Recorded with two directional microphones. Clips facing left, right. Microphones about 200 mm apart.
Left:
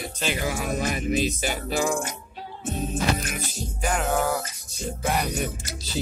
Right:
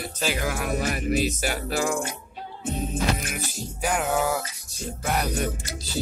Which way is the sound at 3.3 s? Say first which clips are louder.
Even; 5° right (ahead or behind).